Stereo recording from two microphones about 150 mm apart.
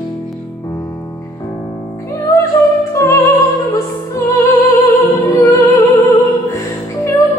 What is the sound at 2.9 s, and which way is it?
Music, 20° left (ahead or behind).